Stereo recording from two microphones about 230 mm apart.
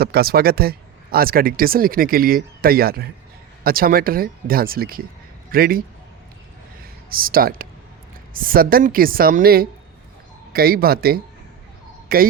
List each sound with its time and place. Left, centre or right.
0.0 s a man's voice: right
7.1 s speech: right